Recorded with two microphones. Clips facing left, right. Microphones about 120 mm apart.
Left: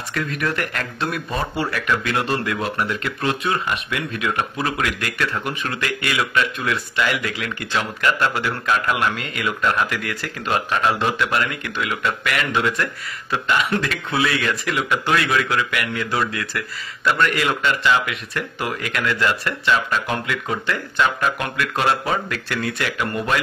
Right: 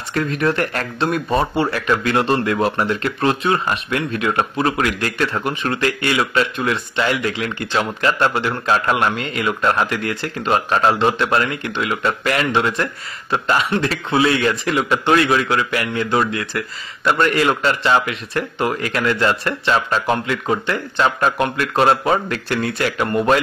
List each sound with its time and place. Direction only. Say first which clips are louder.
0.1 s speech: right 6 dB; 30° right (ahead or behind)